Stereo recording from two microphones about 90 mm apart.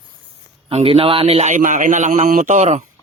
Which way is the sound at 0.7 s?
90° right.